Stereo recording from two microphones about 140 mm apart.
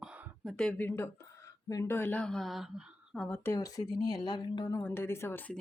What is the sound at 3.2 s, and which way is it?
Speech, 15° left (ahead or behind).